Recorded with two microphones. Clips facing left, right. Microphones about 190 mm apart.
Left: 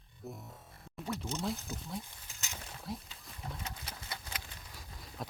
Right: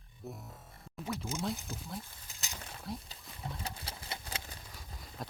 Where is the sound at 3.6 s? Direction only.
30° right (ahead or behind).